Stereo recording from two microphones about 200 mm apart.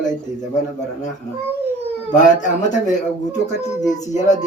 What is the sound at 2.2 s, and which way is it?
Speech, 40° left (ahead or behind).